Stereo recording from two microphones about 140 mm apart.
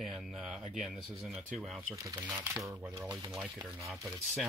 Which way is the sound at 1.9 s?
25° right (ahead or behind).